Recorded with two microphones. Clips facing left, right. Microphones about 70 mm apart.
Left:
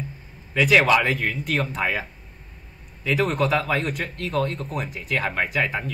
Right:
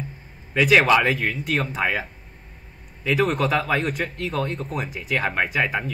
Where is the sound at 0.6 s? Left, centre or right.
Centre.